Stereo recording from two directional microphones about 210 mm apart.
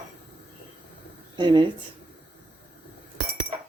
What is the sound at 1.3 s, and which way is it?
Speech, 20° right (ahead or behind).